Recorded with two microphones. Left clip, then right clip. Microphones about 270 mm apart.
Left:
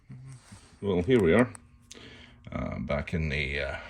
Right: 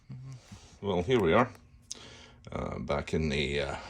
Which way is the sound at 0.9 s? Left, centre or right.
Centre.